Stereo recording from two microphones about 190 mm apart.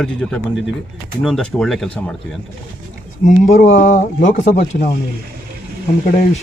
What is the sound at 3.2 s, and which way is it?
Speech, 45° left (ahead or behind).